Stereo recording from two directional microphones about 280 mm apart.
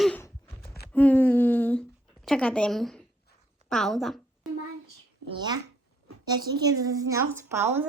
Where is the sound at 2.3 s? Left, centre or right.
Centre.